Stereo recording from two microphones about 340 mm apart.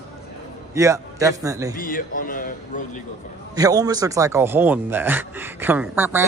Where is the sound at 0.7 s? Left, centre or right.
Centre.